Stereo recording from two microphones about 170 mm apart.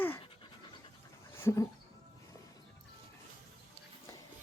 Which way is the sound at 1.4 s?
15° left (ahead or behind).